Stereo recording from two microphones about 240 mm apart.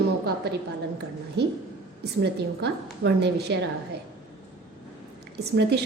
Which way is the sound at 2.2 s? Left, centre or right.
Right.